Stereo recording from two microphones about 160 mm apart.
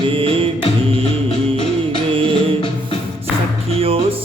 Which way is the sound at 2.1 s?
35° right (ahead or behind).